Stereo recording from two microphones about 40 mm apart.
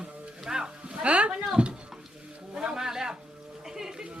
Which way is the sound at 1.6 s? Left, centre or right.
Right.